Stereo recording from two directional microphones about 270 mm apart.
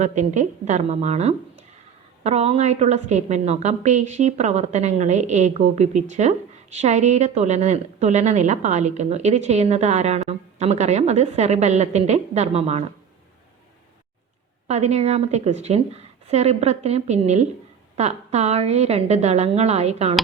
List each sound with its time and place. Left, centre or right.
0.0 s a woman's voice: right
14.7 s a woman's voice: right